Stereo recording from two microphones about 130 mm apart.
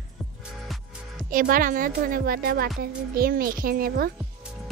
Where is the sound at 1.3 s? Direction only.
90° right.